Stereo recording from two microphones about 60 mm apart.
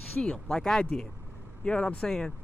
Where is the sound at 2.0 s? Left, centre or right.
Centre.